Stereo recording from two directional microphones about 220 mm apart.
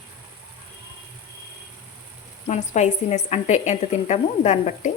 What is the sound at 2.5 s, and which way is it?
A woman's voice, 30° left (ahead or behind).